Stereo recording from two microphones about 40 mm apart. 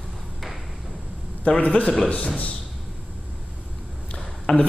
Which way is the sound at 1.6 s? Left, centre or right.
Left.